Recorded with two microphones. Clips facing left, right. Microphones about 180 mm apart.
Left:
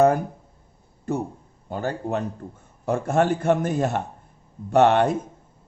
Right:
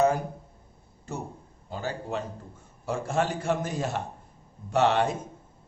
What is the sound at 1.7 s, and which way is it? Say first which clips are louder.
A man's voice: left 6 dB; 55° left (ahead or behind).